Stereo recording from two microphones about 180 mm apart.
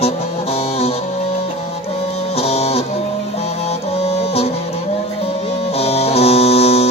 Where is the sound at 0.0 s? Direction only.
35° left (ahead or behind).